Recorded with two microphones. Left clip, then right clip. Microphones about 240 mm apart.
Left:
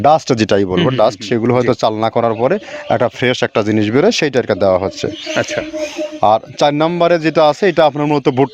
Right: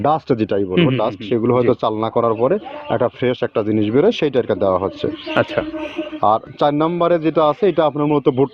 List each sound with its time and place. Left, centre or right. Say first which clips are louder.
0.0 s speech: left 6 dB; left
5.3 s music: even; centre
6.1 s speech: left 4 dB; left